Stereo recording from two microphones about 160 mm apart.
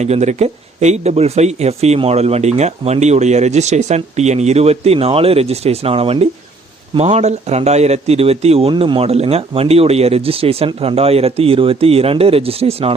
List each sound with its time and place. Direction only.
0.0 s speech: 45° right (ahead or behind)